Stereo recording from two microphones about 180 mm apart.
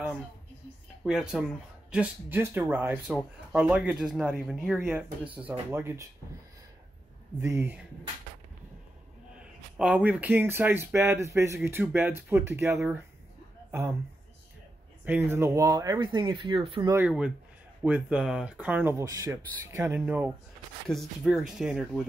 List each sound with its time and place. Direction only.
1.0 s speech: 5° right (ahead or behind)
7.3 s speech: 10° right (ahead or behind)
9.3 s speech: 5° right (ahead or behind)
15.0 s speech: 10° right (ahead or behind); by 16.9 s 30° right (ahead or behind)
16.9 s speech: 5° right (ahead or behind)